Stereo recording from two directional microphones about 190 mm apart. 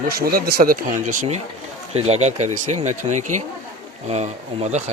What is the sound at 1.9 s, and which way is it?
Speech, 35° right (ahead or behind).